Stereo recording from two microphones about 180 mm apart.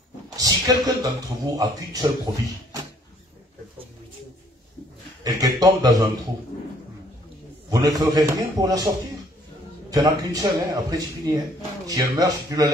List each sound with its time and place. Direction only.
0.4 s speech: 20° right (ahead or behind)
5.2 s speech: 20° right (ahead or behind)
7.7 s speech: 20° right (ahead or behind)